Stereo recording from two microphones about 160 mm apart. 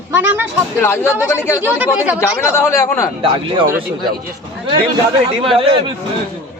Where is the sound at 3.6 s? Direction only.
60° right (ahead or behind).